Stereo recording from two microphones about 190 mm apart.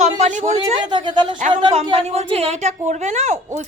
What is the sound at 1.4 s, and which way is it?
A woman's voice, 40° right (ahead or behind).